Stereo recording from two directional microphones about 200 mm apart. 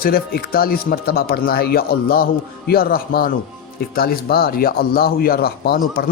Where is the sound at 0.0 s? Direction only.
50° left (ahead or behind).